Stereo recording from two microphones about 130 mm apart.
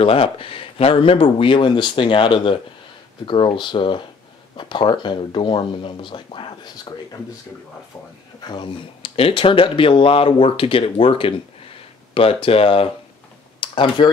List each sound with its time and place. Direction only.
0.0 s speech: 45° left (ahead or behind)
8.5 s speech: 40° left (ahead or behind)